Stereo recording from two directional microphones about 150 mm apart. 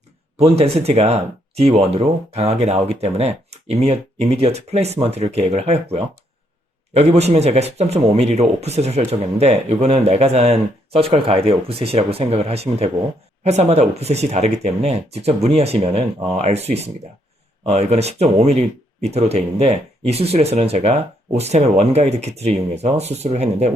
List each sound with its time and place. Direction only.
0.3 s speech: 40° right (ahead or behind)